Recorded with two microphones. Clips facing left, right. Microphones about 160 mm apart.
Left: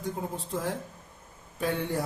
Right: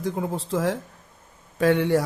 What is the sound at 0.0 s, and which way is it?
Speech, 90° right.